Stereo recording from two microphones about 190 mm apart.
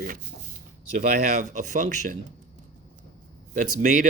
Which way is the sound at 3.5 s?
45° right (ahead or behind).